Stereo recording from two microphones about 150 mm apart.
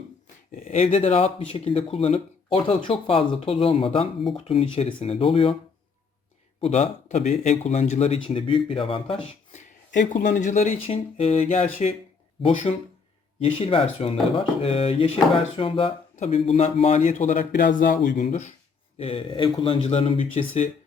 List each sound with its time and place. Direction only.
0.5 s speech: 60° left (ahead or behind); by 5.5 s 40° left (ahead or behind)
6.6 s speech: 45° left (ahead or behind)
9.5 s speech: 55° left (ahead or behind)
13.4 s speech: 35° left (ahead or behind)
16.1 s speech: 45° left (ahead or behind)
17.0 s speech: 60° left (ahead or behind)
18.9 s speech: 40° left (ahead or behind)